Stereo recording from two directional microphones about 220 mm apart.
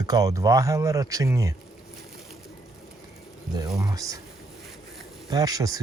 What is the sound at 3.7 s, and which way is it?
Speech, 15° right (ahead or behind).